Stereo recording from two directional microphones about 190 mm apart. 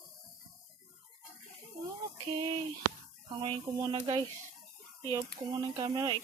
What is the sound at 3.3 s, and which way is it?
Speech, 25° right (ahead or behind).